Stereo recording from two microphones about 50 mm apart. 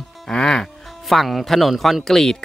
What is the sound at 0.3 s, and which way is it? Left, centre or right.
Speech, centre.